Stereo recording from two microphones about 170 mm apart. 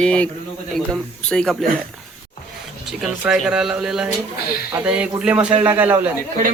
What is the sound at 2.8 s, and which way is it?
A man's voice, centre (ahead or behind).